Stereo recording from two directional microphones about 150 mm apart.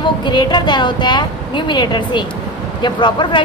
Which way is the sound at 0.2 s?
30° left (ahead or behind).